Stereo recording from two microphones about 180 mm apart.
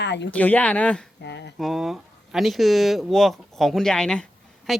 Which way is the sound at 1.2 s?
75° left (ahead or behind).